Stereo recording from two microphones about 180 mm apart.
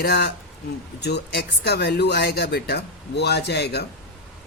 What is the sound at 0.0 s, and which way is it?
Speech, 65° left (ahead or behind).